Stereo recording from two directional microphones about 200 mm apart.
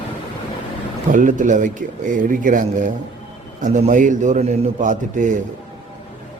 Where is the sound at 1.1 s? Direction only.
40° right (ahead or behind).